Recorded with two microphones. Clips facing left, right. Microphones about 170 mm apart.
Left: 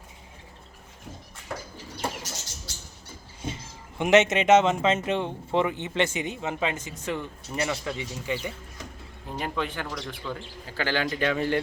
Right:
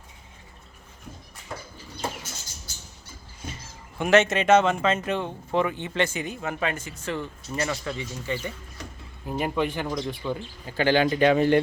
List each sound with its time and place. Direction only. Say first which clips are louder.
2.2 s rodents: left 3 dB; 75° left (ahead or behind)
3.4 s speech: left 4 dB; 25° left (ahead or behind)
9.3 s speech: right 5 dB; 10° right (ahead or behind)